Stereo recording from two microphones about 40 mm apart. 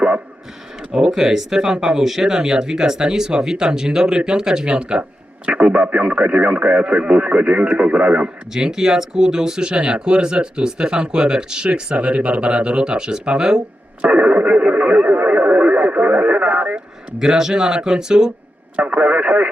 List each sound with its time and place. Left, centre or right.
0.9 s speech: right
1.1 s speech: centre; by 8.3 s right
8.5 s speech: centre
11.7 s speech: right
14.0 s radio: right
17.2 s speech: centre
18.8 s speech: right